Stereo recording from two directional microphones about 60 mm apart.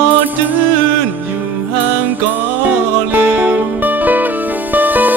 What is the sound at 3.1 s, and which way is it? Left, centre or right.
Music, right.